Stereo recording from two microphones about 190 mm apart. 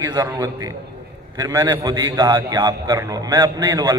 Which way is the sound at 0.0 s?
20° right (ahead or behind).